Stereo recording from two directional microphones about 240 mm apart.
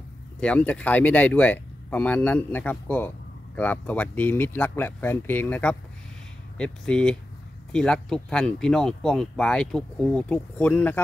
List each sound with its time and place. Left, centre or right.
0.4 s speech: centre